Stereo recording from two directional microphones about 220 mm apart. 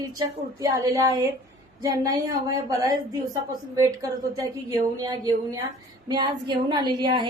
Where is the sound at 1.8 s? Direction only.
15° right (ahead or behind).